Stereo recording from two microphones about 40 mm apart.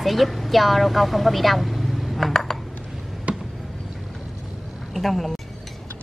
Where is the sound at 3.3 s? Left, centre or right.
Right.